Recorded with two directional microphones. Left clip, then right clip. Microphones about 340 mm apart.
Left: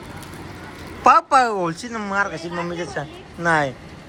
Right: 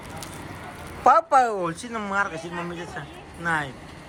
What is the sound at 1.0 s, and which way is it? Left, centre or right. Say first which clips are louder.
Speech: left 3 dB; centre.